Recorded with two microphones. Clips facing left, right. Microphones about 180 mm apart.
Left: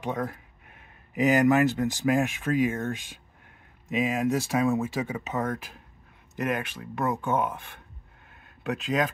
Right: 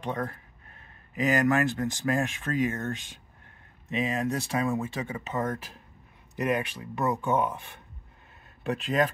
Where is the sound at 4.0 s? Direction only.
15° left (ahead or behind).